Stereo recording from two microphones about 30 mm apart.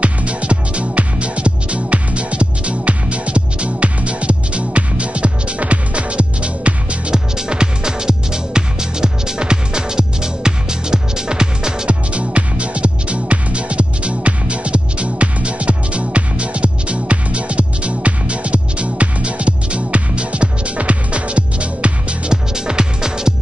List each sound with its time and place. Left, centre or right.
0.0 s music: right
7.1 s music: right
11.9 s music: right
22.3 s music: right